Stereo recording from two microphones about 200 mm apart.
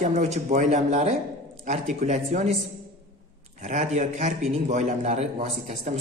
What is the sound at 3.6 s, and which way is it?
A woman's voice, 40° right (ahead or behind).